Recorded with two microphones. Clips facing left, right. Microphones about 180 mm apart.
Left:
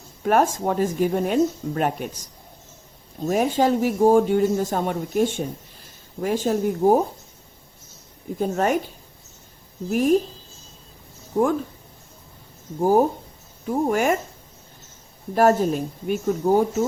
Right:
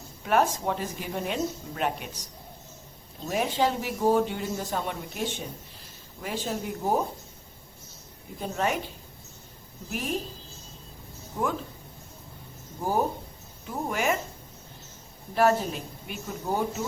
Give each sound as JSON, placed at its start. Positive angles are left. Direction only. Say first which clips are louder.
{"t": 0.2, "sound": "speech", "louder": "left 5 dB", "side_deg": 45}
{"t": 3.2, "sound": "speech", "louder": "left 6 dB", "side_deg": 45}
{"t": 8.4, "sound": "speech", "louder": "left 7 dB", "side_deg": 45}
{"t": 9.9, "sound": "speech", "louder": "left 13 dB", "side_deg": 45}
{"t": 12.8, "sound": "speech", "louder": "left 9 dB", "side_deg": 45}
{"t": 15.4, "sound": "speech", "louder": "left 6 dB", "side_deg": 45}